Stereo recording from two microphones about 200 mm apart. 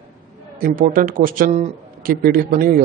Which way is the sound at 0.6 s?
45° right (ahead or behind).